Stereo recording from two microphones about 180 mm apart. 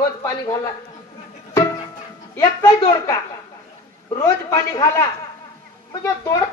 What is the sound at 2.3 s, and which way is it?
A man's voice, 15° left (ahead or behind).